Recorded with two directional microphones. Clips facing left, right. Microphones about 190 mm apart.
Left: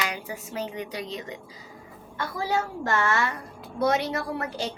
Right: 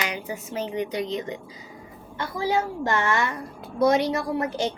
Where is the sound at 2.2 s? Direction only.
20° right (ahead or behind).